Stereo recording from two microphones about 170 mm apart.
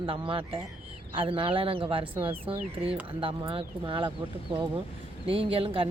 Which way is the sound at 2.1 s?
10° right (ahead or behind).